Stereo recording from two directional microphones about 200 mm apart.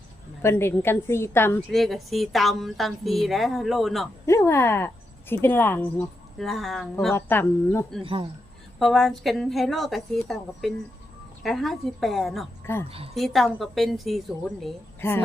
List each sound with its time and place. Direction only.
0.4 s a woman's voice: 10° left (ahead or behind)
1.7 s speech: centre (ahead or behind)
4.3 s a woman's voice: 15° left (ahead or behind)
7.1 s a woman's voice: 10° left (ahead or behind)
8.0 s speech: 25° right (ahead or behind)
8.8 s speech: centre (ahead or behind)
12.7 s a woman's voice: 10° left (ahead or behind)
13.1 s speech: centre (ahead or behind)